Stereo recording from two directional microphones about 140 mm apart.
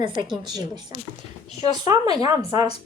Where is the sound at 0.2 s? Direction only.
30° right (ahead or behind).